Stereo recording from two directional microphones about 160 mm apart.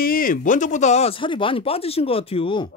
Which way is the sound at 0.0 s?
60° left (ahead or behind).